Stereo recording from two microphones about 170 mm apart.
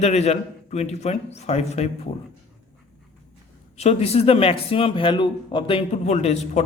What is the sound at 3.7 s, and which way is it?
Speech, 40° left (ahead or behind).